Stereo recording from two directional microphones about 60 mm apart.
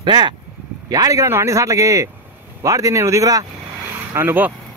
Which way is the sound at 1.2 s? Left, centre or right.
Right.